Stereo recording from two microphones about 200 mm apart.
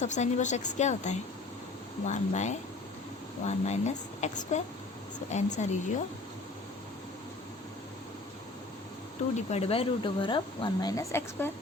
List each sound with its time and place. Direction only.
0.0 s a woman's voice: 35° left (ahead or behind)
9.5 s speech: 30° left (ahead or behind); by 11.5 s 10° left (ahead or behind)